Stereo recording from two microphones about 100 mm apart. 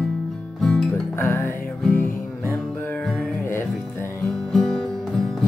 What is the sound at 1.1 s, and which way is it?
Music, 20° left (ahead or behind).